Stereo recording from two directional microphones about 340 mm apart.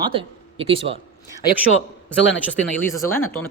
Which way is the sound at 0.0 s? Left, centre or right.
Centre.